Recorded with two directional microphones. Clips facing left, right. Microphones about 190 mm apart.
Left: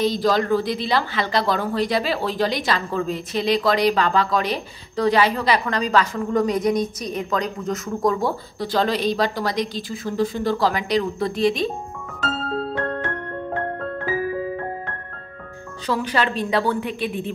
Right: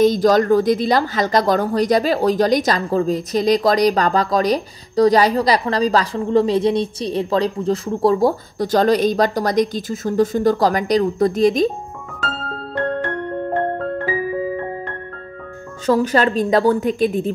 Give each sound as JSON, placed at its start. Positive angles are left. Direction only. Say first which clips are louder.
{"t": 0.0, "sound": "speech", "louder": "right 6 dB", "side_deg": -45}
{"t": 12.7, "sound": "music", "louder": "right 4 dB", "side_deg": 0}
{"t": 15.9, "sound": "a woman's voice", "louder": "right 7 dB", "side_deg": -45}